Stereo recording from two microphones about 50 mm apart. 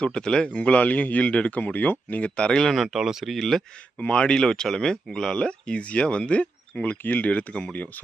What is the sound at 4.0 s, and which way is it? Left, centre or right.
Speech, left.